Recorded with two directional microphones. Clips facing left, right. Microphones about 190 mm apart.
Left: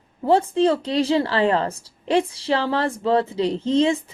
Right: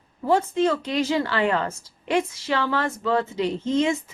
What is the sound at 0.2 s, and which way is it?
A woman's voice, 30° left (ahead or behind).